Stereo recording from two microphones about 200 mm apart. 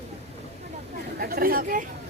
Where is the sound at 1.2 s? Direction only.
50° right (ahead or behind).